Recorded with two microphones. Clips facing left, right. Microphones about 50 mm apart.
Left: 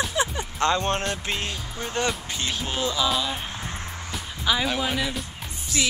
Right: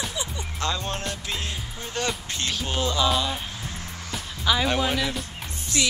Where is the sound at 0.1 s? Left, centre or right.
Left.